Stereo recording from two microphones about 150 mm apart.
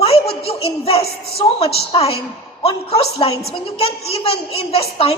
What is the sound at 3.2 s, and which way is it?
A woman's voice, 40° left (ahead or behind).